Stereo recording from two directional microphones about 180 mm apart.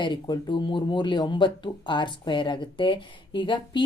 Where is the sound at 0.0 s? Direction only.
25° left (ahead or behind).